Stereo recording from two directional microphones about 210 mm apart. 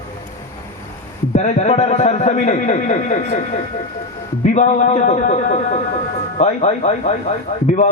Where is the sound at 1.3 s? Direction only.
35° left (ahead or behind).